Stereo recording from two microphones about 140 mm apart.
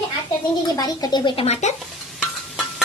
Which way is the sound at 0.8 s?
30° left (ahead or behind).